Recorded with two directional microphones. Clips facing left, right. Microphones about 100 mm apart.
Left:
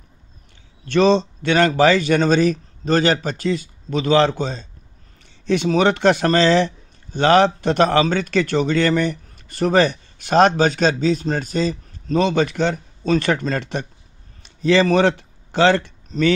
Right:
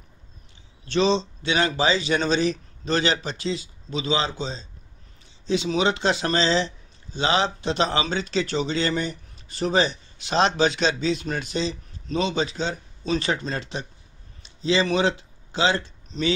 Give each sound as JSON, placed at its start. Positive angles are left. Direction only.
{"t": 0.8, "sound": "speech", "side_deg": 55}